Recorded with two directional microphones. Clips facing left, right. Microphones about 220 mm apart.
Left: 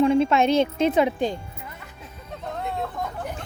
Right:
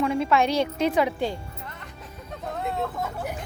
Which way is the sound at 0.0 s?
25° left (ahead or behind).